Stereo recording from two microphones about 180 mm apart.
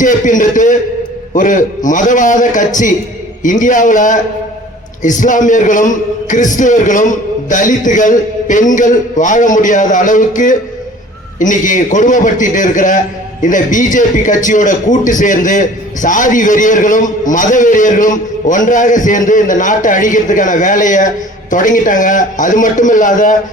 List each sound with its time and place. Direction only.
0.0 s a man's voice: 45° left (ahead or behind)